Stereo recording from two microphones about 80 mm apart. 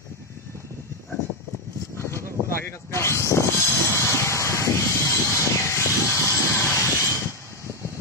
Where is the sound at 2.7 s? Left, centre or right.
Left.